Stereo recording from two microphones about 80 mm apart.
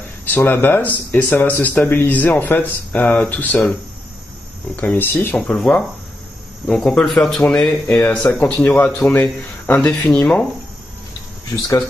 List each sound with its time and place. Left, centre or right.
0.2 s speech: left
4.7 s speech: left
5.6 s speech: centre
7.9 s a man's voice: left
9.8 s speech: centre
11.6 s speech: left